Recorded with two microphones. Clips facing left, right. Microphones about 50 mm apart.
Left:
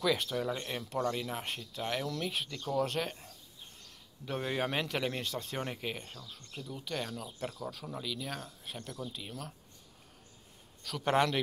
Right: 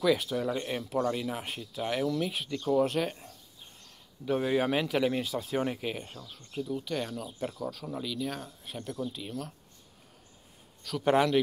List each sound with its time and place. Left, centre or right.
0.0 s speech: centre
2.5 s speech: centre
2.9 s speech: centre
10.8 s speech: centre